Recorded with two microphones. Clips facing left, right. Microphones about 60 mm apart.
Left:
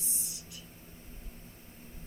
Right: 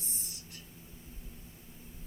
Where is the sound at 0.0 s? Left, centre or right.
Right.